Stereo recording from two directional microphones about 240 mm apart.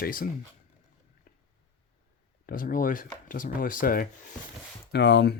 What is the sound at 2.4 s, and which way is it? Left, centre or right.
Speech, left.